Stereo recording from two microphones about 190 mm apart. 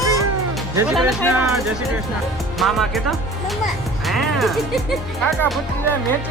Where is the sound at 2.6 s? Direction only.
Centre (ahead or behind).